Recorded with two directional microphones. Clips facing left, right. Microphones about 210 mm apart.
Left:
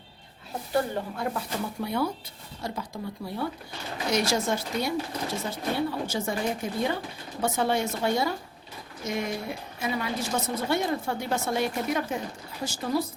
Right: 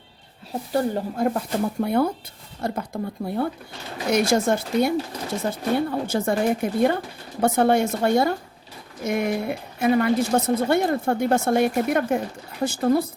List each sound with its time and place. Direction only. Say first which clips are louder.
0.7 s a woman's voice: right 4 dB; 40° right (ahead or behind); by 13.1 s 55° right (ahead or behind)